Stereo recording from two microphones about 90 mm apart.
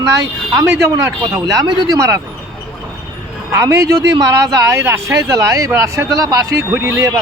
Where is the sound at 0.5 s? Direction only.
35° right (ahead or behind).